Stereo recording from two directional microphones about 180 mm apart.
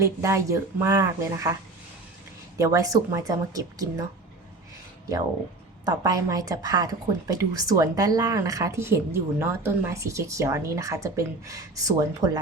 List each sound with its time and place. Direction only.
0.0 s speech: 15° right (ahead or behind)
2.6 s a woman's voice: 20° right (ahead or behind)
5.8 s a woman's voice: 20° right (ahead or behind)